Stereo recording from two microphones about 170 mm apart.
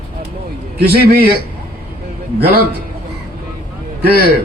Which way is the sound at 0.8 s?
65° right (ahead or behind).